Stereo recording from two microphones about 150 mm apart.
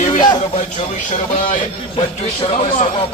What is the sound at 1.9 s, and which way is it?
Speech, 40° left (ahead or behind).